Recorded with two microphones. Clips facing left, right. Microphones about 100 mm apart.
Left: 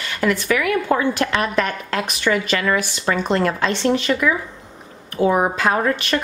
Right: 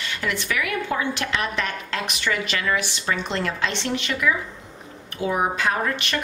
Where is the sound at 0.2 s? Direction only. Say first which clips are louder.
Left 8 dB; 45° left (ahead or behind).